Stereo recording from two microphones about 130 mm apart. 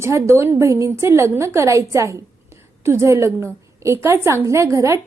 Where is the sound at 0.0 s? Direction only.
20° right (ahead or behind).